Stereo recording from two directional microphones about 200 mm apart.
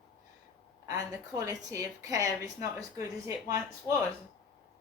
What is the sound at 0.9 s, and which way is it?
A woman's voice, 15° right (ahead or behind).